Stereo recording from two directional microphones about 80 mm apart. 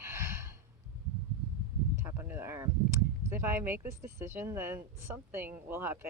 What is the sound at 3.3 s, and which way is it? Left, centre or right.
Speech, right.